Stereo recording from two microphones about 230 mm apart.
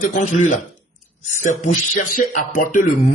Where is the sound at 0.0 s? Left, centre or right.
Left.